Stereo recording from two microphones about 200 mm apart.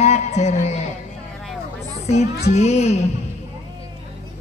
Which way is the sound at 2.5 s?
35° left (ahead or behind).